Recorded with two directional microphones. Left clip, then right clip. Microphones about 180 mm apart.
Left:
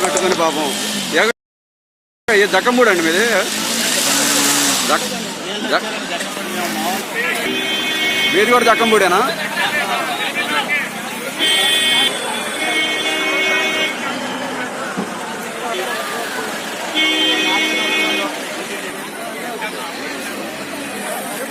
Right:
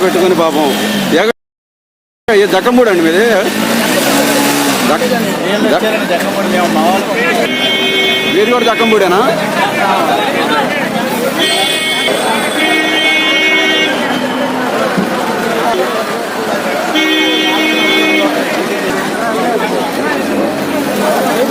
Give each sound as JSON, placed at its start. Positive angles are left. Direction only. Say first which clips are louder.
{"t": 2.5, "sound": "speech", "louder": "right 4 dB", "side_deg": -15}
{"t": 4.1, "sound": "vehicle", "louder": "right 5 dB", "side_deg": -40}
{"t": 8.4, "sound": "a man's voice", "louder": "right 1 dB", "side_deg": 0}